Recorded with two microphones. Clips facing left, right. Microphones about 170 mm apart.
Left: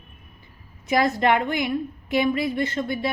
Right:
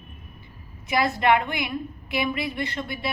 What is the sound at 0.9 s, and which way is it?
A woman's voice, 40° left (ahead or behind).